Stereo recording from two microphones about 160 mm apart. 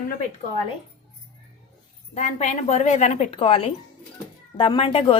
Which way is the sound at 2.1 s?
45° left (ahead or behind).